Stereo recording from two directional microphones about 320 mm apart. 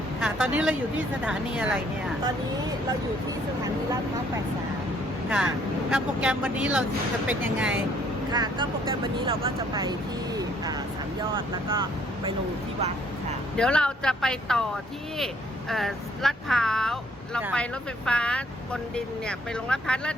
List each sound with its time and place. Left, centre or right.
0.2 s speech: centre
5.9 s speech: centre
11.7 s speech: centre
13.6 s speech: centre
15.7 s speech: centre